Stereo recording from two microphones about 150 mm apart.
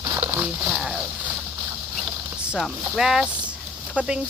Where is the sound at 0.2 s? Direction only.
15° right (ahead or behind).